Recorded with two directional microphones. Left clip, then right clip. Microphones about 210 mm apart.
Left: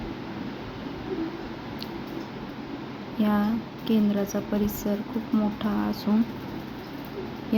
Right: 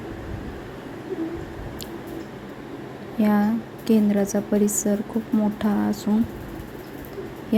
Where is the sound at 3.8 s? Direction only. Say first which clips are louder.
Right 5 dB; 20° right (ahead or behind).